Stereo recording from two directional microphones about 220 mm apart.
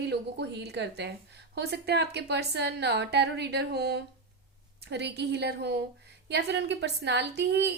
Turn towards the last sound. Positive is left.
turn(degrees=-50)  # may be behind; listen again after turning